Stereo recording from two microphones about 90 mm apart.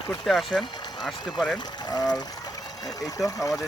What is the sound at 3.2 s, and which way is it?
Speech, centre (ahead or behind).